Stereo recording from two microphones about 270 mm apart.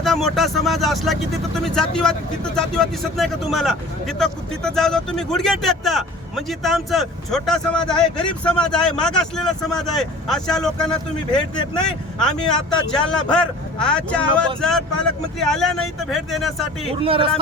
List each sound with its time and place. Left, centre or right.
0.0 s speech: centre
12.9 s speech: centre
17.0 s speech: centre